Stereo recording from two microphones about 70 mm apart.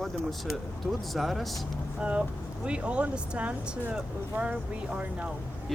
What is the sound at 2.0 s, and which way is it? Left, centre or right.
Speech, centre.